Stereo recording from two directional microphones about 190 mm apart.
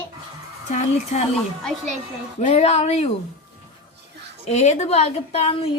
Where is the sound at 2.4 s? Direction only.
35° left (ahead or behind).